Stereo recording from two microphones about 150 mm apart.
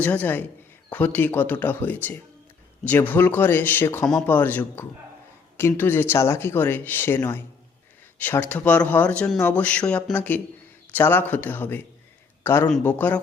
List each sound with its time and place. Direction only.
0.0 s speech: 10° left (ahead or behind)